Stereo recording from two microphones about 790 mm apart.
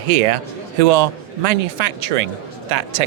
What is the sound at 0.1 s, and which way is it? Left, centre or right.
A man's voice, right.